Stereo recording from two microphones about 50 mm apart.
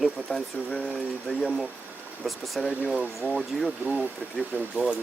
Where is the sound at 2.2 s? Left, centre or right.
Centre.